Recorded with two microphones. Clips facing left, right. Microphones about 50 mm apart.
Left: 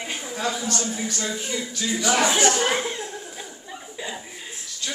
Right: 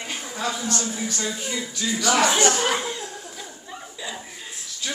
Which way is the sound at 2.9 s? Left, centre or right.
Left.